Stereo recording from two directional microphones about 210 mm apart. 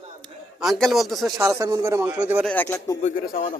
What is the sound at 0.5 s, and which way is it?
Speech, centre (ahead or behind).